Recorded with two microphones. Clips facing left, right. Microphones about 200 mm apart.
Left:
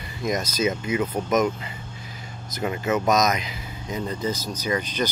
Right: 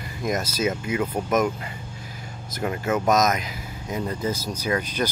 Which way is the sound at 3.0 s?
5° right (ahead or behind).